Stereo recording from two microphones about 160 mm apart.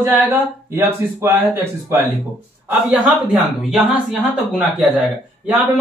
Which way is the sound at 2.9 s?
Centre (ahead or behind).